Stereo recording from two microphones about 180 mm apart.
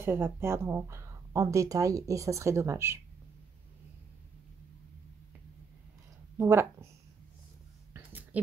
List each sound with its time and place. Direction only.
0.0 s speech: 10° right (ahead or behind)
6.3 s speech: 15° right (ahead or behind)
7.9 s a sound: 10° right (ahead or behind)